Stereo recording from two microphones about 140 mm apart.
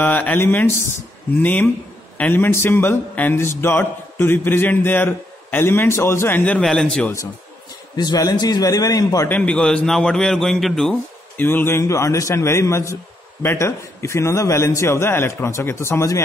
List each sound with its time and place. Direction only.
0.0 s a man's voice: 10° left (ahead or behind)
7.9 s a man's voice: 30° left (ahead or behind)
9.3 s a man's voice: 10° left (ahead or behind)
11.3 s a man's voice: 15° left (ahead or behind)